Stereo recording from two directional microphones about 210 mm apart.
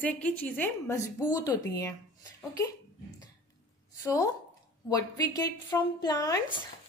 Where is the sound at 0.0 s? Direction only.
5° left (ahead or behind).